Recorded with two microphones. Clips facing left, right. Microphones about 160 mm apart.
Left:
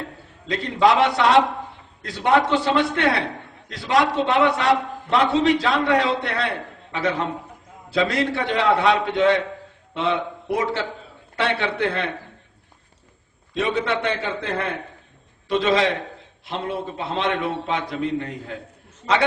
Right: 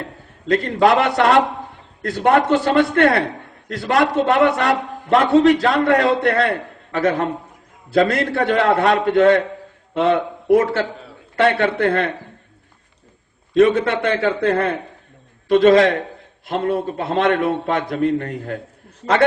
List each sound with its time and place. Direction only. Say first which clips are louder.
0.4 s a man's voice: right 3 dB; 50° right (ahead or behind)
13.5 s a man's voice: right 8 dB; 50° right (ahead or behind)
15.4 s a man's voice: right 8 dB; 50° right (ahead or behind)